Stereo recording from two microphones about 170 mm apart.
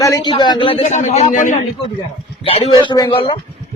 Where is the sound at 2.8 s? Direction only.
25° left (ahead or behind).